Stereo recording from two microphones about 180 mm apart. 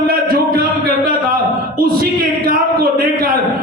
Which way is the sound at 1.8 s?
55° right (ahead or behind).